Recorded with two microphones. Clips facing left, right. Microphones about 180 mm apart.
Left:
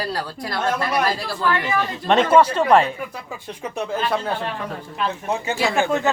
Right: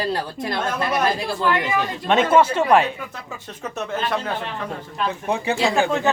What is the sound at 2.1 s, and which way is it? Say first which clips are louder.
Speech: left 1 dB; 5° right (ahead or behind).